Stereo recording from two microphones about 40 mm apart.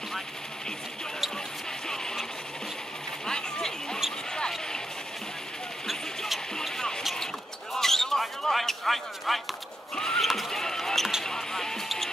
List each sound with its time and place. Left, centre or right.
3.3 s speech: centre
5.9 s a sound: centre
7.7 s a sound: centre
9.3 s speech: centre
9.9 s speech: centre
10.2 s speech: centre
10.5 s speech: centre